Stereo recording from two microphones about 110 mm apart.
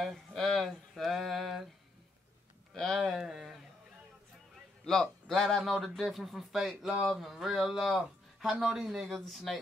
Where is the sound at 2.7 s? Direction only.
Centre (ahead or behind).